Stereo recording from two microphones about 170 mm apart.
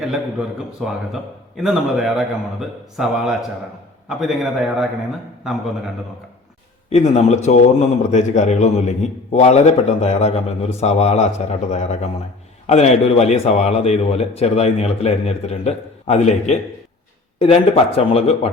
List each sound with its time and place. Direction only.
0.0 s a man's voice: 5° right (ahead or behind)
6.9 s a man's voice: 40° left (ahead or behind)